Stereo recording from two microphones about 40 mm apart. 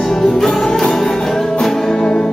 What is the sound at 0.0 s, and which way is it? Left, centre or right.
Music, centre.